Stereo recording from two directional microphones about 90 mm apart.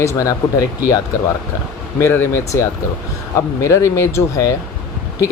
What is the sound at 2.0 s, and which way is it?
Speech, 30° left (ahead or behind).